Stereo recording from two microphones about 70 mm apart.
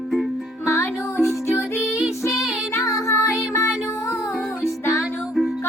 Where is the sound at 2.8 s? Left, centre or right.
Left.